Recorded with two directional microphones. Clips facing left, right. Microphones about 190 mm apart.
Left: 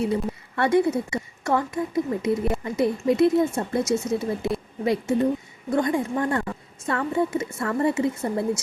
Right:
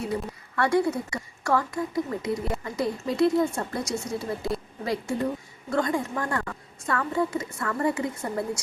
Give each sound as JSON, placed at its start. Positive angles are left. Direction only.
{"t": 0.0, "sound": "a woman's voice", "side_deg": 25}